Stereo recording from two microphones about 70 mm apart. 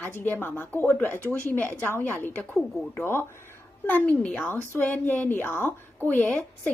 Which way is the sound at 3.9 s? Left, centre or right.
Left.